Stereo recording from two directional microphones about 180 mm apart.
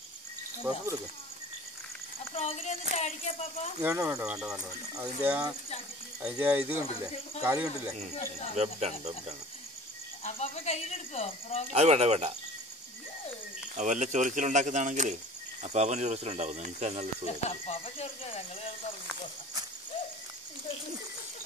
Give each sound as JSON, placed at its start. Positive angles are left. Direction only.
{"t": 0.7, "sound": "speech", "side_deg": -10}
{"t": 2.3, "sound": "speech", "side_deg": 35}
{"t": 3.8, "sound": "speech", "side_deg": -15}
{"t": 8.5, "sound": "speech", "side_deg": -35}
{"t": 10.2, "sound": "speech", "side_deg": 35}
{"t": 11.7, "sound": "speech", "side_deg": -35}
{"t": 13.7, "sound": "speech", "side_deg": -45}
{"t": 17.5, "sound": "speech", "side_deg": 35}